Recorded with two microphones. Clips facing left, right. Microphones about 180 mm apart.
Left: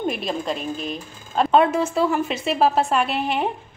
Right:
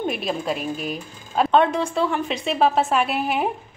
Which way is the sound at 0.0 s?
5° right (ahead or behind).